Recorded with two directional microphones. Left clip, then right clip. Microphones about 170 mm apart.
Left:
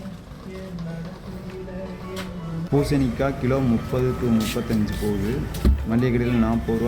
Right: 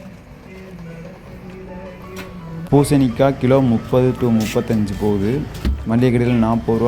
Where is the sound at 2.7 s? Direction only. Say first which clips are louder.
Right 7 dB; 15° right (ahead or behind).